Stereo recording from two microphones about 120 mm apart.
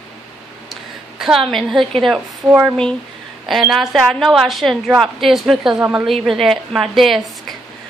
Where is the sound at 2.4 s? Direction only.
20° right (ahead or behind).